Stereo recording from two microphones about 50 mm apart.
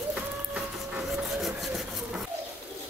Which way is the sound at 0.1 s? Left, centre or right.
Centre.